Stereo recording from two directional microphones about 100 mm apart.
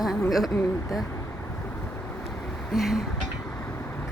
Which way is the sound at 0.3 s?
Centre (ahead or behind).